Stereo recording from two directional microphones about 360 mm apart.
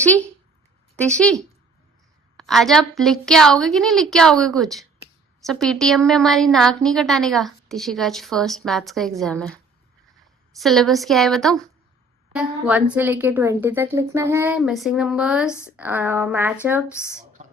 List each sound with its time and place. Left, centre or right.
0.0 s a woman's voice: centre
10.6 s a woman's voice: centre
17.4 s a sound: right